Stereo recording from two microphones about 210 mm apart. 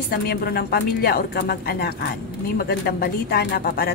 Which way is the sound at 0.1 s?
45° left (ahead or behind).